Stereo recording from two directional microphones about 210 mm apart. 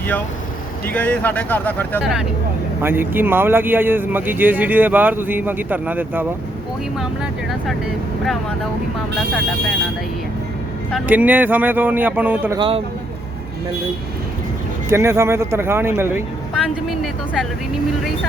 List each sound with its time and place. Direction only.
0.9 s speech: 5° left (ahead or behind); by 6.2 s 10° right (ahead or behind)
10.9 s speech: 10° right (ahead or behind)
12.5 s speech: 25° right (ahead or behind)
14.8 s speech: 15° right (ahead or behind)
16.6 s speech: centre (ahead or behind)